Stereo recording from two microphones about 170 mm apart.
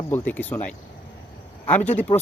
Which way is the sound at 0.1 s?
10° left (ahead or behind).